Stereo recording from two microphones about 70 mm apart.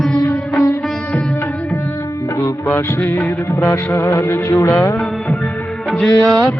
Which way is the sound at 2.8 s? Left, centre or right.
Left.